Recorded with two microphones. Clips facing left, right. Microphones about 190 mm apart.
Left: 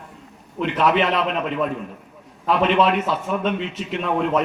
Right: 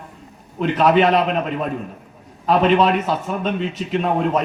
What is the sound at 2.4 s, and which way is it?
A man's voice, 40° right (ahead or behind).